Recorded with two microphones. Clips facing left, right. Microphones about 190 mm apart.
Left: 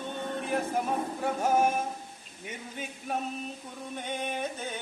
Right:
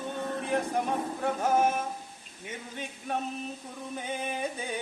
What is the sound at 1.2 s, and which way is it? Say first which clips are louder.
Speech: even; 10° left (ahead or behind).